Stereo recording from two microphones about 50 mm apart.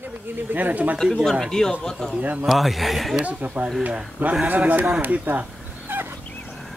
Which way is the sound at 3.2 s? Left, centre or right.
Right.